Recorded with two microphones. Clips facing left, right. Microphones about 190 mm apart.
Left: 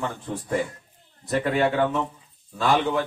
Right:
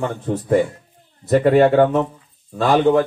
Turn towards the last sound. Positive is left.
turn(degrees=-40)  # may be behind; listen again after turning